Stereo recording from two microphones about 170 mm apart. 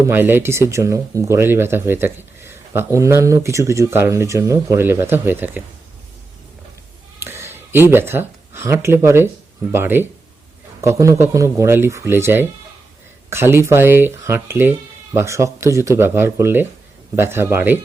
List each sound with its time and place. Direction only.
0.0 s speech: 10° right (ahead or behind)
7.2 s speech: 15° right (ahead or behind)